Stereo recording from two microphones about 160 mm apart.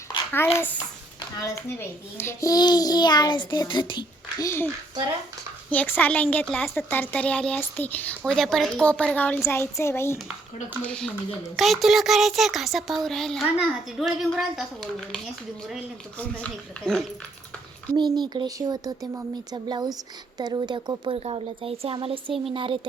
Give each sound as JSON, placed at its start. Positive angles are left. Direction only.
{"t": 0.3, "sound": "speech", "side_deg": 10}
{"t": 2.1, "sound": "a child's voice", "side_deg": 20}
{"t": 4.4, "sound": "speech", "side_deg": 15}
{"t": 5.7, "sound": "speech", "side_deg": 10}
{"t": 10.8, "sound": "a sound", "side_deg": 5}
{"t": 16.1, "sound": "a sound", "side_deg": 10}
{"t": 17.9, "sound": "a child's voice", "side_deg": -25}